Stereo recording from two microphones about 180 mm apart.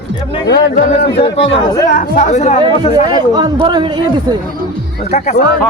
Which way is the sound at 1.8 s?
50° left (ahead or behind).